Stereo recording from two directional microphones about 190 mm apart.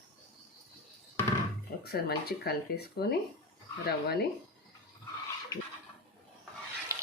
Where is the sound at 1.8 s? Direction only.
55° left (ahead or behind).